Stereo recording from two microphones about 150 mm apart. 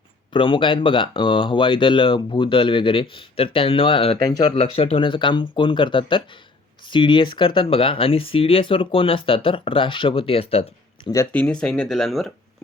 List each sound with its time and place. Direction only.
0.3 s speech: 35° left (ahead or behind)
11.0 s speech: 20° left (ahead or behind)
11.3 s speech: 10° left (ahead or behind)